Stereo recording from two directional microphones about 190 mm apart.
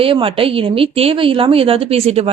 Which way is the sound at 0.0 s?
30° right (ahead or behind).